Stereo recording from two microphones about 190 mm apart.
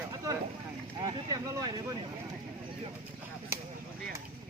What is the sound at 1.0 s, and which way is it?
Speech, 20° right (ahead or behind).